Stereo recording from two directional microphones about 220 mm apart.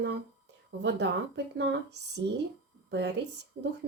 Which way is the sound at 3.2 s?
50° right (ahead or behind).